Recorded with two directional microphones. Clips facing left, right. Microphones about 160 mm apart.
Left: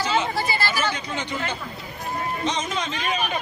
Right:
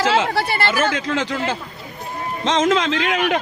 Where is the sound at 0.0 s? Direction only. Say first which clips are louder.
Right 5 dB; 90° right; by 0.9 s 55° right (ahead or behind).